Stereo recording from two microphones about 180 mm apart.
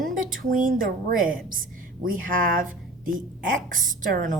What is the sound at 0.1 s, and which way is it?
A woman's voice, 50° right (ahead or behind).